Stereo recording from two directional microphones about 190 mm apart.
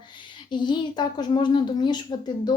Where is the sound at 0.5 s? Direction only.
25° left (ahead or behind).